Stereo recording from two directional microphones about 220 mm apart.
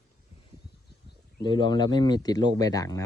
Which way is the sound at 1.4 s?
20° left (ahead or behind).